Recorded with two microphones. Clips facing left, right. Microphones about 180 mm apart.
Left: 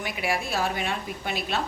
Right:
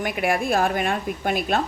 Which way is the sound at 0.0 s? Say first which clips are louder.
Right 6 dB; 55° right (ahead or behind).